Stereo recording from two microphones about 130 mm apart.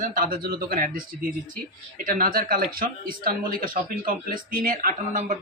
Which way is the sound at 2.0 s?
90° right.